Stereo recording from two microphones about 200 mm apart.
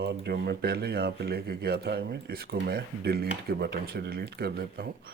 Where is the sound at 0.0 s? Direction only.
55° right (ahead or behind).